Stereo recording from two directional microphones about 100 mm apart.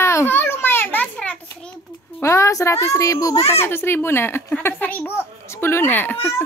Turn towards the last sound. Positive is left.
turn(degrees=20)  # may be behind; listen again after turning